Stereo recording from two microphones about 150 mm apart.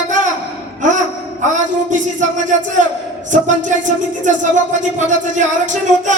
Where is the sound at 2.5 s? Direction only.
55° right (ahead or behind).